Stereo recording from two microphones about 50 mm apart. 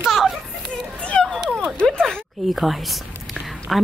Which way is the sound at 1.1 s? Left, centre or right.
Centre.